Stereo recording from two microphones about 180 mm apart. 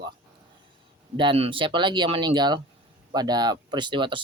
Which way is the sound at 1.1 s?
30° right (ahead or behind).